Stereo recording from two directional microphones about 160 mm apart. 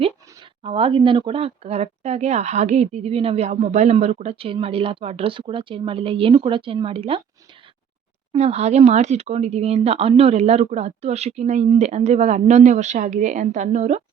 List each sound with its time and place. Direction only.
0.6 s speech: 35° right (ahead or behind)
8.3 s speech: 40° right (ahead or behind)